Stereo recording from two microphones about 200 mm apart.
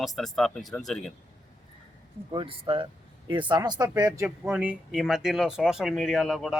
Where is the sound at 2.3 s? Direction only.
25° right (ahead or behind).